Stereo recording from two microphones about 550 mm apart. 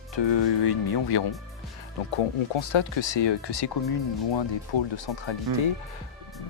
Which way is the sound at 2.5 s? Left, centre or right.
Left.